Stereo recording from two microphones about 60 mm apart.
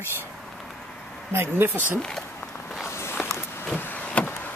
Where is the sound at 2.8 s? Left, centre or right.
Left.